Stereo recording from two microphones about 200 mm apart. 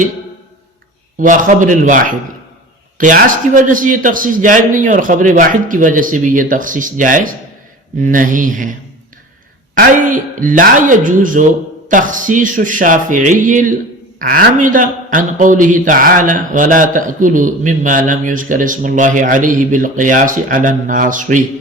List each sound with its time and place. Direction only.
1.2 s a man's voice: 40° right (ahead or behind)
9.7 s a man's voice: 40° right (ahead or behind)